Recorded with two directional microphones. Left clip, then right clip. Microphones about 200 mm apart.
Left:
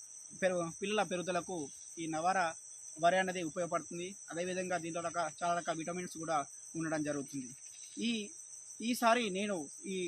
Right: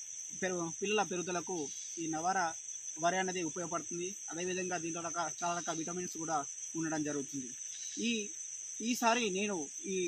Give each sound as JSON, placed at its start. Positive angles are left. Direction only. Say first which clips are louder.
{"t": 0.6, "sound": "speech", "louder": "right 1 dB", "side_deg": 20}